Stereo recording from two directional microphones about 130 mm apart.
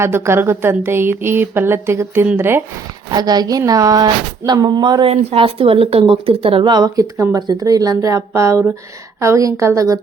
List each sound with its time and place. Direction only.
0.0 s speech: 20° right (ahead or behind)
3.1 s speech: 30° right (ahead or behind)
5.1 s a woman's voice: 45° right (ahead or behind); by 10.0 s 25° right (ahead or behind)